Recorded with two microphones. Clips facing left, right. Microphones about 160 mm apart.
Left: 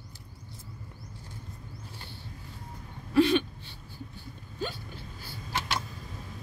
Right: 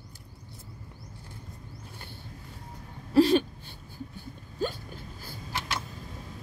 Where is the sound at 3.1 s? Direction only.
40° right (ahead or behind).